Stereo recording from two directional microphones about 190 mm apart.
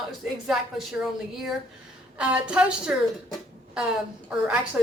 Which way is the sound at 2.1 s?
5° right (ahead or behind).